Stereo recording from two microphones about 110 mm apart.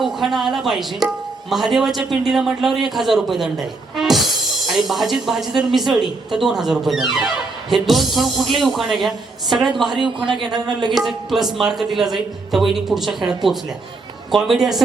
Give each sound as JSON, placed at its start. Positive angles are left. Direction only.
{"t": 0.0, "sound": "speech", "side_deg": 0}
{"t": 3.9, "sound": "music", "side_deg": 0}
{"t": 4.6, "sound": "speech", "side_deg": 0}
{"t": 10.2, "sound": "a man's voice", "side_deg": -50}
{"t": 10.9, "sound": "speech", "side_deg": 0}